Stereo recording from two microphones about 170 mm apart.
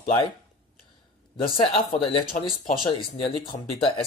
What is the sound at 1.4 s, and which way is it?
Speech, 30° left (ahead or behind).